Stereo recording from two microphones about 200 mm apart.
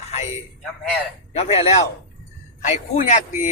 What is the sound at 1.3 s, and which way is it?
A man's voice, 30° left (ahead or behind).